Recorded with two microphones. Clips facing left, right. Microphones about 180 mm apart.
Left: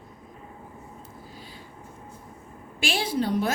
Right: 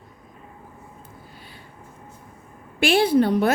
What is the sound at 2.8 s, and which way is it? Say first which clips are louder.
Speech: right 9 dB; 60° right (ahead or behind).